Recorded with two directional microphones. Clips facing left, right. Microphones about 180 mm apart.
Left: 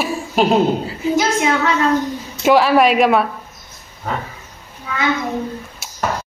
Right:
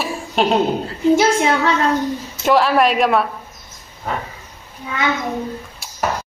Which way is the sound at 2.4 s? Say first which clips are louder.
Left 2 dB; centre (ahead or behind).